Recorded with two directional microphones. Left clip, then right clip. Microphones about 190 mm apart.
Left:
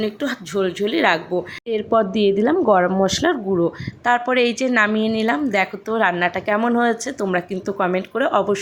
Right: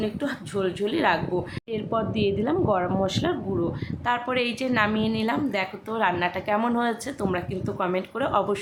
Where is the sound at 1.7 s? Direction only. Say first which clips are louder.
Left 10 dB; 30° left (ahead or behind).